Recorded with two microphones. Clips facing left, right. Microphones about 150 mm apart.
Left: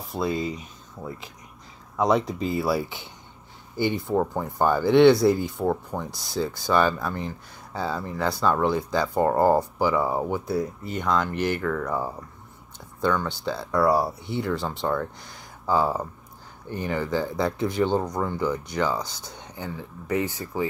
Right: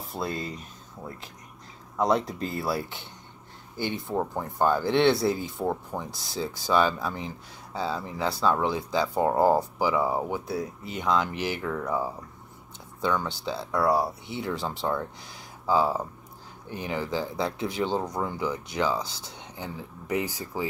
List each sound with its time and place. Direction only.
0.1 s speech: centre (ahead or behind)
20.1 s speech: 15° right (ahead or behind)